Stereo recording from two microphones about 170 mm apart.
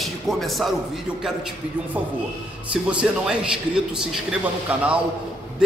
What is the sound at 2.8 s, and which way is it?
Speech, 5° right (ahead or behind).